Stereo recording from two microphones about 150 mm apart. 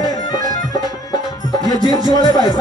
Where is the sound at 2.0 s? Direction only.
25° left (ahead or behind).